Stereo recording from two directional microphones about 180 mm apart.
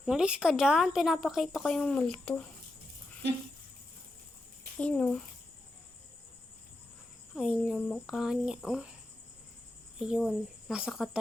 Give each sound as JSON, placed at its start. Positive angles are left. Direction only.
{"t": 0.0, "sound": "speech", "side_deg": -5}
{"t": 4.8, "sound": "a child's voice", "side_deg": 5}
{"t": 7.3, "sound": "speech", "side_deg": 0}
{"t": 10.0, "sound": "speech", "side_deg": 0}